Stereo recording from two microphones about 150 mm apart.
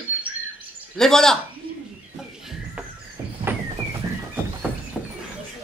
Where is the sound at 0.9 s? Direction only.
5° left (ahead or behind).